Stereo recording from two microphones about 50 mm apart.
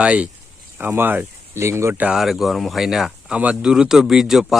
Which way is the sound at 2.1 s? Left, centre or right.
Centre.